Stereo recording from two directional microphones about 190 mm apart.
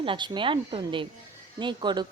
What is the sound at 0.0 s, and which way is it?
A woman's voice, 25° right (ahead or behind).